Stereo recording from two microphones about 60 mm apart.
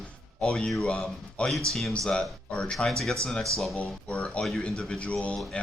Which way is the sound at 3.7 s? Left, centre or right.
Left.